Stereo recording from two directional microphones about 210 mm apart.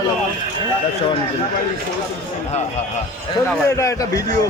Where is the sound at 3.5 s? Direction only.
15° left (ahead or behind).